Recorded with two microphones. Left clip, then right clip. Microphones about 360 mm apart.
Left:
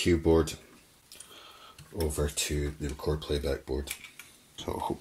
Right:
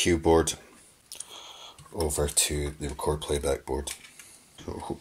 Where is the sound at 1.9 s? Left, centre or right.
Right.